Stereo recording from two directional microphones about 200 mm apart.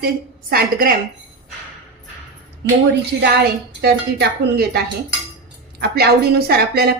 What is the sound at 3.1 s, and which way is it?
A woman's voice, 60° right (ahead or behind).